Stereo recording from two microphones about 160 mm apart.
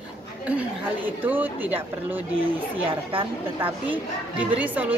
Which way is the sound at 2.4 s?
35° right (ahead or behind).